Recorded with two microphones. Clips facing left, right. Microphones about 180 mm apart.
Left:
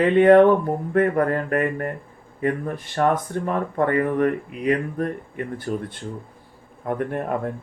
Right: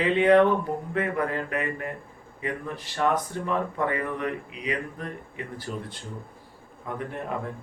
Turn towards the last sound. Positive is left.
turn(degrees=55)  # may be behind; listen again after turning